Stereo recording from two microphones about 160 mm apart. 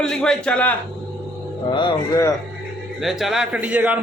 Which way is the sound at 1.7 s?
30° left (ahead or behind).